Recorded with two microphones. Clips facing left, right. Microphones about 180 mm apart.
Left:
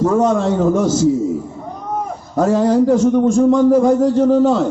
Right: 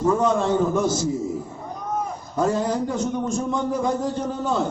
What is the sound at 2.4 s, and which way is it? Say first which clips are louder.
A man's voice: left 9 dB; 85° left.